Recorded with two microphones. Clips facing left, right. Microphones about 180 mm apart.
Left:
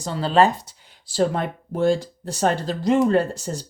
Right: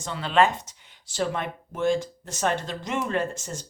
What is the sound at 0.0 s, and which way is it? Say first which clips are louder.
Speech: left 4 dB; 35° left (ahead or behind).